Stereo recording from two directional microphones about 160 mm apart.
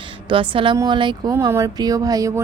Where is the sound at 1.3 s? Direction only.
15° right (ahead or behind).